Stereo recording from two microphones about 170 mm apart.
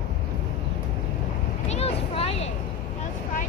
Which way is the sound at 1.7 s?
35° left (ahead or behind).